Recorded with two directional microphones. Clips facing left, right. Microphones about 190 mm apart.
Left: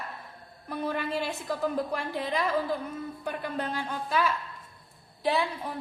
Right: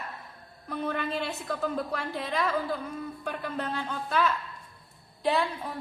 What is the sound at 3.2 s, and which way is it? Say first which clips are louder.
A woman's voice: left 1 dB; 15° left (ahead or behind).